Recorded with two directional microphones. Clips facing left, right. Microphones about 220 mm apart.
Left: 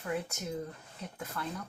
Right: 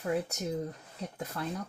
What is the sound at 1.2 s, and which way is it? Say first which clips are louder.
Speech: right 2 dB; 35° right (ahead or behind).